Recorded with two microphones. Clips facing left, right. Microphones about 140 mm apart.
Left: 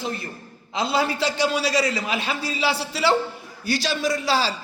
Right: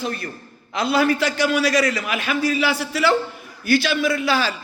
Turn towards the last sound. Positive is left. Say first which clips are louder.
# right 2 dB
turn(degrees=30)  # may be behind; listen again after turning